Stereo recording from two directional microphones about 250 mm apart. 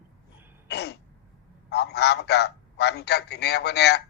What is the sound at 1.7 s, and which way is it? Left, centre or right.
A man's voice, left.